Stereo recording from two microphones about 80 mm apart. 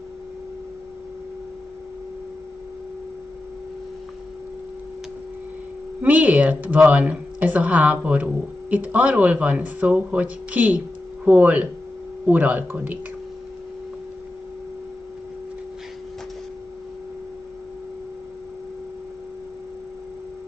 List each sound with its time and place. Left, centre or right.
6.0 s speech: centre